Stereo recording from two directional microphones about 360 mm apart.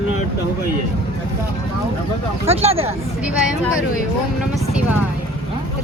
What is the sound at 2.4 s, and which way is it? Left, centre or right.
Speech, centre.